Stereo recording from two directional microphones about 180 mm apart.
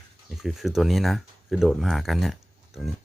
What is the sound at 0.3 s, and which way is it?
Speech, centre (ahead or behind).